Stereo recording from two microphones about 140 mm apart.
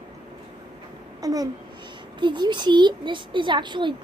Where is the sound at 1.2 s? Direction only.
25° right (ahead or behind).